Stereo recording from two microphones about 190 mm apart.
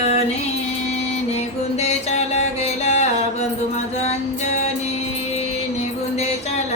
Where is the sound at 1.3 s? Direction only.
35° left (ahead or behind).